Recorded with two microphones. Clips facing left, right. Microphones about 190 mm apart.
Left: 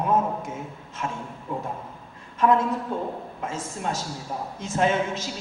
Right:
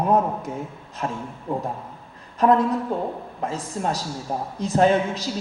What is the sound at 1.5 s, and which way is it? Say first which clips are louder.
A man's voice: right 4 dB; 40° right (ahead or behind).